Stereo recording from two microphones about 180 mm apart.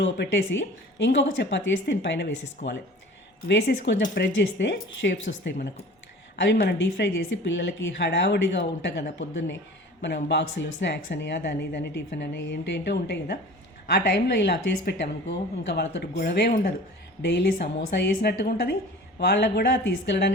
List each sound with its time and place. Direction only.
0.0 s speech: 85° left
3.4 s speech: 70° left (ahead or behind)
7.2 s a woman's voice: 90° left; by 20.3 s 70° left (ahead or behind)